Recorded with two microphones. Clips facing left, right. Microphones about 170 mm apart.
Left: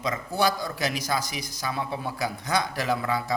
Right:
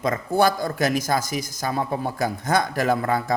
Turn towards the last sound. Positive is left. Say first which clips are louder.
# right 5 dB
turn(degrees=-50)  # may be behind; listen again after turning